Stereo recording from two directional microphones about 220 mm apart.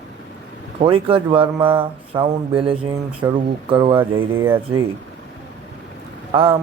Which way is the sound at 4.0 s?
10° right (ahead or behind).